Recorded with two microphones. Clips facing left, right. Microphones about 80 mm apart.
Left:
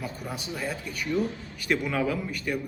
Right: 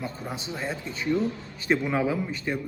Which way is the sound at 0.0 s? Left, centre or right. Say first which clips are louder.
Right 1 dB; right.